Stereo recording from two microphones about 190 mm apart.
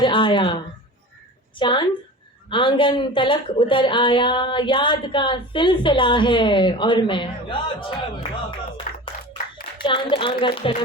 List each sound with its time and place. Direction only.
0.0 s speech: 25° left (ahead or behind)
1.5 s a woman's voice: 25° left (ahead or behind)
8.9 s a sound: 40° left (ahead or behind)
9.8 s a woman's voice: 25° left (ahead or behind)